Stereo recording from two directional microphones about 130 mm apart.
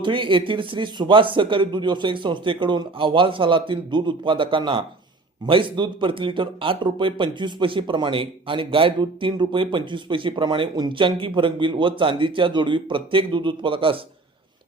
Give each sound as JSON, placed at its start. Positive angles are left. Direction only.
{"t": 0.0, "sound": "speech", "side_deg": -40}